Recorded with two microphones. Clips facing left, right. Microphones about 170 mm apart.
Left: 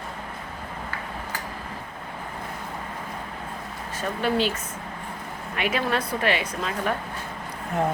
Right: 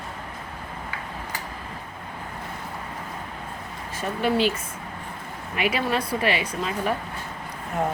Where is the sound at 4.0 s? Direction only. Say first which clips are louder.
Right 1 dB; 10° right (ahead or behind).